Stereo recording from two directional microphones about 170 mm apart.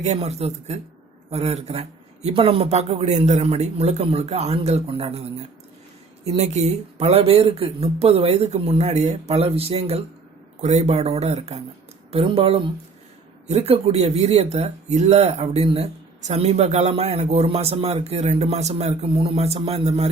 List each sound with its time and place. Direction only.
0.0 s speech: 40° right (ahead or behind)